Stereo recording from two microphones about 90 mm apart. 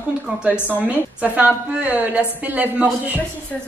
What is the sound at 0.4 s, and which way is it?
A woman's voice, 15° right (ahead or behind).